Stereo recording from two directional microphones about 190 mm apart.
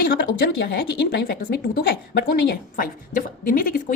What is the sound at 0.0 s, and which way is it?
A woman's voice, 50° left (ahead or behind).